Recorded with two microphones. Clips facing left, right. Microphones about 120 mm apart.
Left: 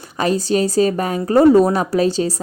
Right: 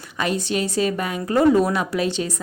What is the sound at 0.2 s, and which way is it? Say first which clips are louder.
A woman's voice: left 6 dB; 35° left (ahead or behind).